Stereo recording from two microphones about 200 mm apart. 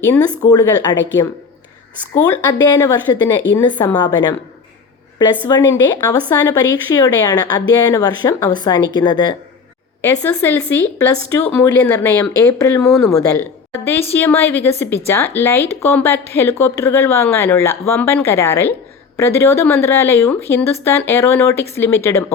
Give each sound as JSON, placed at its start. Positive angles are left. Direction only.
{"t": 0.4, "sound": "speech", "side_deg": 20}
{"t": 5.5, "sound": "speech", "side_deg": 20}
{"t": 10.0, "sound": "a woman's voice", "side_deg": 10}